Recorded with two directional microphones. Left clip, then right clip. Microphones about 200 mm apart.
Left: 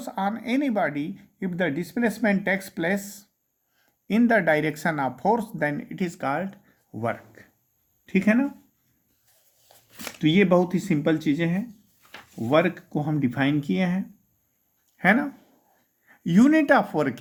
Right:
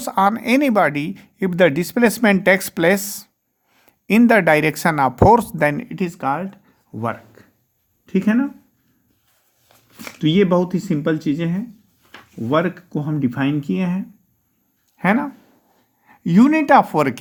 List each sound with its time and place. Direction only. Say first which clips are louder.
0.0 s speech: right 11 dB; 45° right (ahead or behind); by 7.4 s 25° right (ahead or behind)
9.6 s a sound: right 2 dB; 25° left (ahead or behind)
10.2 s speech: right 3 dB; 10° right (ahead or behind); by 17.2 s 40° right (ahead or behind)